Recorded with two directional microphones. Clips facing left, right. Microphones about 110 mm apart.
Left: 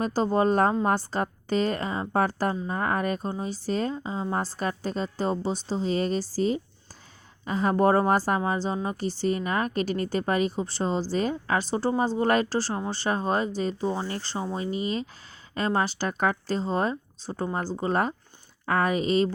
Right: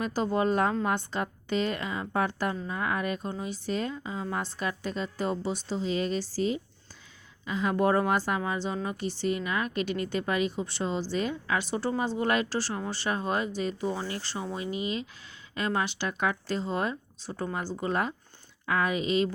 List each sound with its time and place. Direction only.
0.0 s a woman's voice: 35° left (ahead or behind)